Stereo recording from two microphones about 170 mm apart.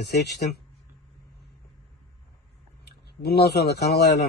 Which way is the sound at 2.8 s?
70° left (ahead or behind).